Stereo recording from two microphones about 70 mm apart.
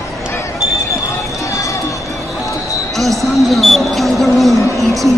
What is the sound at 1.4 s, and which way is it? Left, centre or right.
Run, left.